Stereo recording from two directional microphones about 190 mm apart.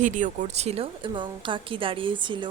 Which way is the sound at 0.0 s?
40° right (ahead or behind).